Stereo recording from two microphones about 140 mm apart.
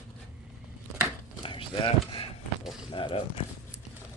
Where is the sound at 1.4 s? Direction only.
40° left (ahead or behind).